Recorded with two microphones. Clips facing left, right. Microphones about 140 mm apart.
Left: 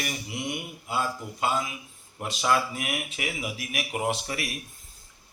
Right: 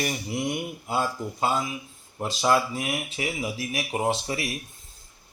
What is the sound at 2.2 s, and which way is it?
Speech, 30° right (ahead or behind).